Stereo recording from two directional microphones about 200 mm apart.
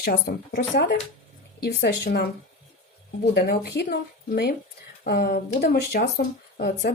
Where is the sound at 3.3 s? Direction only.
50° left (ahead or behind).